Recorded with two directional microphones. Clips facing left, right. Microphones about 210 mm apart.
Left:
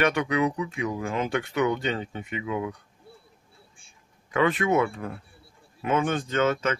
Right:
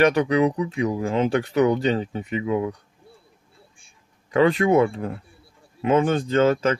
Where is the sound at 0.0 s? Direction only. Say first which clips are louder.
Right 6 dB; 35° right (ahead or behind).